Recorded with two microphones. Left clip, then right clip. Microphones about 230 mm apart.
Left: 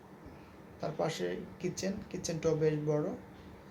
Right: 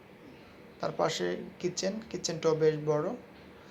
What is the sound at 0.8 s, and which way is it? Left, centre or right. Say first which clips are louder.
Speech: right 4 dB; centre.